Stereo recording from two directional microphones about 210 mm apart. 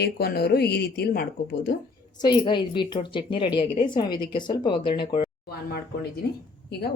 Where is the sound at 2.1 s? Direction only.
20° left (ahead or behind).